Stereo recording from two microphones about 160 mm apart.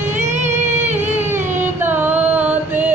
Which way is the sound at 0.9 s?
10° right (ahead or behind).